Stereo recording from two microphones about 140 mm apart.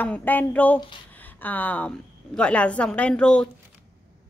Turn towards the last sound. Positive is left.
turn(degrees=10)  # may be behind; listen again after turning